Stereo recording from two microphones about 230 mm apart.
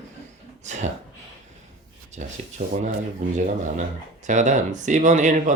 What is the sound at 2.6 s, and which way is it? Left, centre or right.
Speech, right.